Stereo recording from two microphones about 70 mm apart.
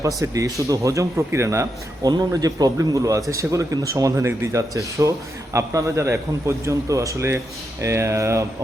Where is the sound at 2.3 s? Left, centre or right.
Right.